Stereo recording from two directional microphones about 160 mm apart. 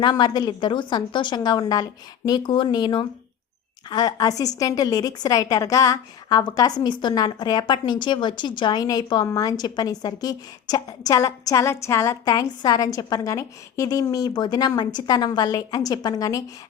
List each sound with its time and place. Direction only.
0.0 s a woman's voice: 25° left (ahead or behind)